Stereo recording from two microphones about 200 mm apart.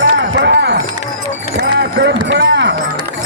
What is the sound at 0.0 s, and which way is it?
Music, 60° right (ahead or behind).